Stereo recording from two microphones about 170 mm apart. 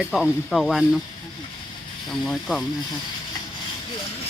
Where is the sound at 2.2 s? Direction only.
Centre (ahead or behind).